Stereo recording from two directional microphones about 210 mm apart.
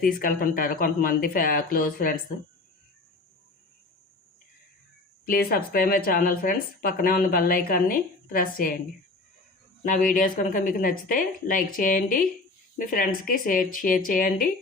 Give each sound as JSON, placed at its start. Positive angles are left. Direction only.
{"t": 0.0, "sound": "speech", "side_deg": 45}
{"t": 5.2, "sound": "speech", "side_deg": 45}
{"t": 9.8, "sound": "speech", "side_deg": 40}